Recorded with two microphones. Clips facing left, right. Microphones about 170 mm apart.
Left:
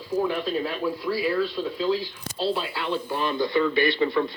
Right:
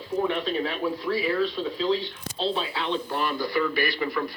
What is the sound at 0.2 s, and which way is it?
Speech, 5° left (ahead or behind).